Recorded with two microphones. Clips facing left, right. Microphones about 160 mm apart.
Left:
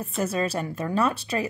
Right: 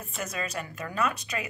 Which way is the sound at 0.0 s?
30° left (ahead or behind).